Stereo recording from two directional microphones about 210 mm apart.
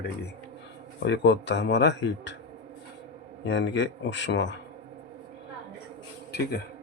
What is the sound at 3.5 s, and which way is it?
Speech, 60° left (ahead or behind).